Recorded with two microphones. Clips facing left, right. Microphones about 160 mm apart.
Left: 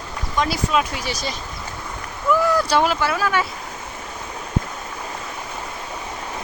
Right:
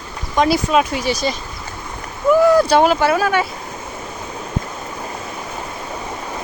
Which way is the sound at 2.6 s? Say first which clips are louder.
Right 6 dB; 50° right (ahead or behind).